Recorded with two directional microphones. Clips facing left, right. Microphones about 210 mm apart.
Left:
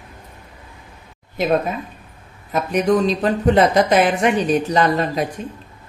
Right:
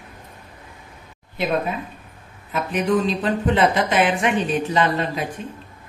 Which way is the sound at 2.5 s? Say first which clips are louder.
Left 4 dB; 40° left (ahead or behind).